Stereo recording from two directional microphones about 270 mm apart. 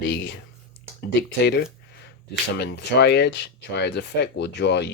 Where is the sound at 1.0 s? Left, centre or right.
Left.